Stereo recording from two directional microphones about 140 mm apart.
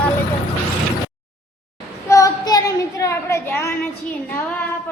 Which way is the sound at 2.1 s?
25° left (ahead or behind).